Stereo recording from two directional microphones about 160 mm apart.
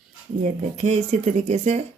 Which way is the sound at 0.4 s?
45° right (ahead or behind).